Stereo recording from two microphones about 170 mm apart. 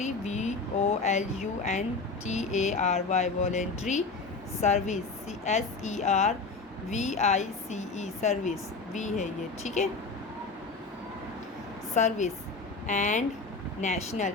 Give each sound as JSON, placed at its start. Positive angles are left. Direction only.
{"t": 0.0, "sound": "speech", "side_deg": 45}
{"t": 11.9, "sound": "speech", "side_deg": 45}